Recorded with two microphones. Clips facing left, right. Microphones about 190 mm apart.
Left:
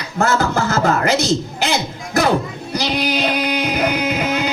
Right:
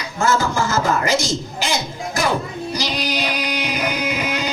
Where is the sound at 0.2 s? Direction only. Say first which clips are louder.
Left 2 dB; 60° left (ahead or behind).